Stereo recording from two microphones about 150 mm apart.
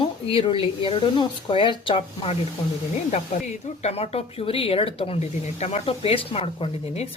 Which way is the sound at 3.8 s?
45° left (ahead or behind).